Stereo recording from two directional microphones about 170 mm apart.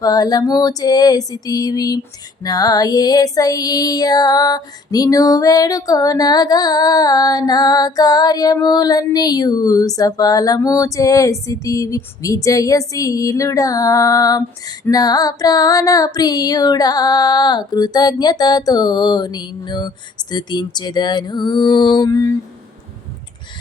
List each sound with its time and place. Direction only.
0.0 s music: 20° left (ahead or behind)